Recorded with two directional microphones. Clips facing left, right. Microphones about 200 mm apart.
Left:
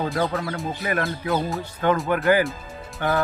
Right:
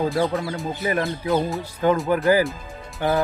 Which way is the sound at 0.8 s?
20° right (ahead or behind).